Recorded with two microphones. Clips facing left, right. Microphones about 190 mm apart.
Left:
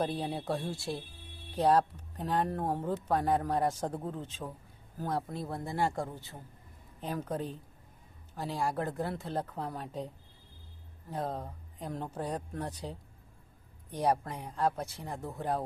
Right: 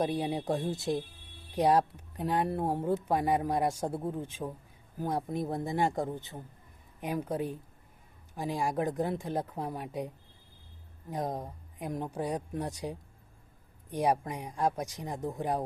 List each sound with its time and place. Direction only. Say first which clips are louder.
0.0 s speech: right 3 dB; 15° right (ahead or behind)
11.1 s speech: right 2 dB; 15° right (ahead or behind)